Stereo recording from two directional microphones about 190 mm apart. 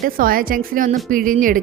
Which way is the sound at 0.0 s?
50° right (ahead or behind).